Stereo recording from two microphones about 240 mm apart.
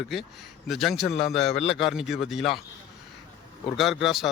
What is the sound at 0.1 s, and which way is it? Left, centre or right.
A man's voice, centre.